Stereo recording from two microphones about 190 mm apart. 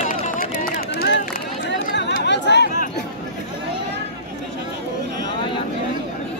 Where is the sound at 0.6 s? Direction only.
55° left (ahead or behind).